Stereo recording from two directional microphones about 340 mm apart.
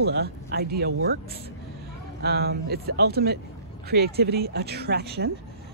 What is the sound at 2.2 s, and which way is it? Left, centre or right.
Speech, right.